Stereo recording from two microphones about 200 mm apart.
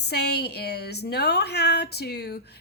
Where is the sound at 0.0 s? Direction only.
55° left (ahead or behind).